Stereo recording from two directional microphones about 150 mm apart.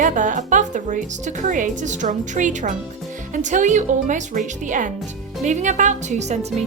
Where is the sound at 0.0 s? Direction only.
60° right (ahead or behind).